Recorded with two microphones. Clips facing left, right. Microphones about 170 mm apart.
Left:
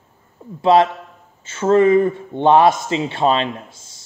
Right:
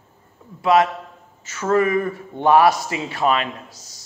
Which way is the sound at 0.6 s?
30° left (ahead or behind).